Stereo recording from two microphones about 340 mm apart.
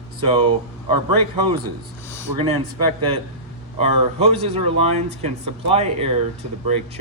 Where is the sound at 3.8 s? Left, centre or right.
Centre.